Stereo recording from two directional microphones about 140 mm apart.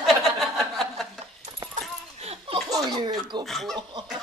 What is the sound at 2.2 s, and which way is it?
Laughter, 45° right (ahead or behind).